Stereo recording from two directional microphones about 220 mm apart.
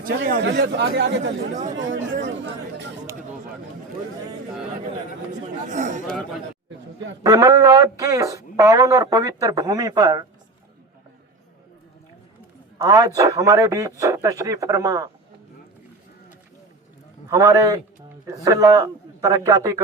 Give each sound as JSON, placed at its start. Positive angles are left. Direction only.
{"t": 0.0, "sound": "speech", "side_deg": -50}
{"t": 5.6, "sound": "a man's voice", "side_deg": -35}
{"t": 7.2, "sound": "a man's voice", "side_deg": -15}
{"t": 12.8, "sound": "a man's voice", "side_deg": -15}
{"t": 17.2, "sound": "a man's voice", "side_deg": -15}